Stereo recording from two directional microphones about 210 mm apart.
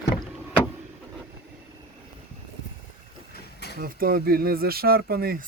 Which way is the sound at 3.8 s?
45° right (ahead or behind).